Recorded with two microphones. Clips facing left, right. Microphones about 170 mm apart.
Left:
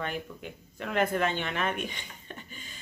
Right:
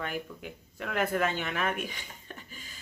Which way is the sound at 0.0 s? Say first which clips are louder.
Left 1 dB; 5° right (ahead or behind).